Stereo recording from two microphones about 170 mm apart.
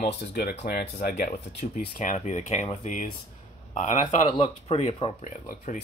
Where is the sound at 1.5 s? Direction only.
45° left (ahead or behind).